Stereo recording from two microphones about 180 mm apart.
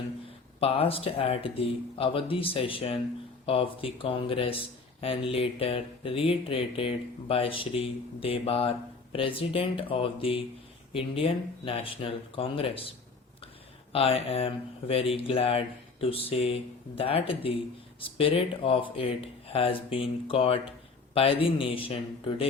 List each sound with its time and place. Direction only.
0.6 s speech: 30° left (ahead or behind)
13.9 s speech: 30° left (ahead or behind)